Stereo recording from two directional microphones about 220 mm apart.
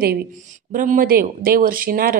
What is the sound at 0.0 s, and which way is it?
Speech, 40° right (ahead or behind).